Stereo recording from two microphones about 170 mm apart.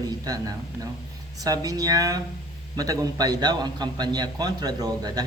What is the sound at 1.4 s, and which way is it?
A man's voice, 20° right (ahead or behind).